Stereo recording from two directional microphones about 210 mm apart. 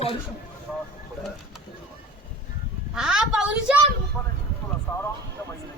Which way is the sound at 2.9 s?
5° right (ahead or behind).